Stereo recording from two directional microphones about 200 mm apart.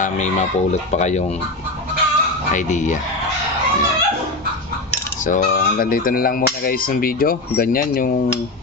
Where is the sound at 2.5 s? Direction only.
35° left (ahead or behind).